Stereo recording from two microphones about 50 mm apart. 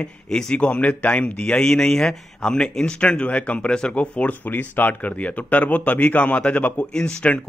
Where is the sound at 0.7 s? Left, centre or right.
Left.